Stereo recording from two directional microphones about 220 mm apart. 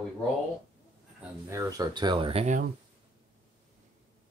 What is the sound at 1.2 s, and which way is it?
Speech, 15° right (ahead or behind).